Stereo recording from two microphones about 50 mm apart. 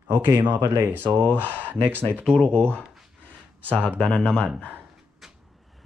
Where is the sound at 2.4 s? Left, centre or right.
Centre.